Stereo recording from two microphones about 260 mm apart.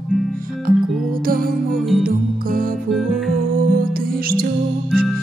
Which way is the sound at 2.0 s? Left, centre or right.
Right.